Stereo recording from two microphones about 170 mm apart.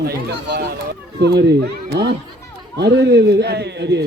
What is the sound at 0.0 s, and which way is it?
Run, 65° right (ahead or behind).